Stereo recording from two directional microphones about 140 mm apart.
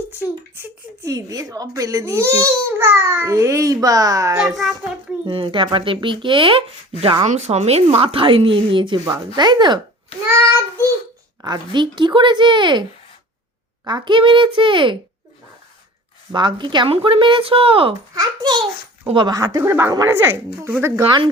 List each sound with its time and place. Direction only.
0.1 s speech: 15° right (ahead or behind)
4.4 s a child's voice: centre (ahead or behind)
5.2 s speech: 35° right (ahead or behind)
7.3 s speech: 55° right (ahead or behind); by 9.8 s 30° right (ahead or behind)
11.4 s speech: 30° right (ahead or behind)
13.8 s speech: 35° right (ahead or behind)
16.3 s speech: 35° right (ahead or behind)
18.1 s speech: 30° right (ahead or behind)